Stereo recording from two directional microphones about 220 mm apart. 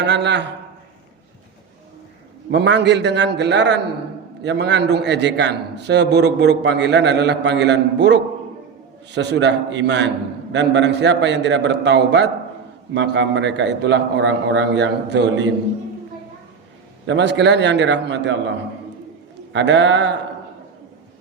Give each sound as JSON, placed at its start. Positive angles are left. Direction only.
{"t": 0.0, "sound": "a man's voice", "side_deg": -50}
{"t": 2.5, "sound": "a man's voice", "side_deg": -55}
{"t": 17.1, "sound": "a man's voice", "side_deg": -55}
{"t": 19.5, "sound": "a man's voice", "side_deg": -55}